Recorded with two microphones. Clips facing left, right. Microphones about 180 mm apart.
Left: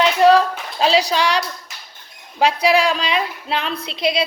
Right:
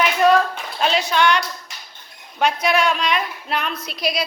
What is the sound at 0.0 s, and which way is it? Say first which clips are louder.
Clapping: left 3 dB; 30° left (ahead or behind).